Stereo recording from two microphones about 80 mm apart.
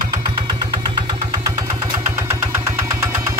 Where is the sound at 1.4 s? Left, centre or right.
Right.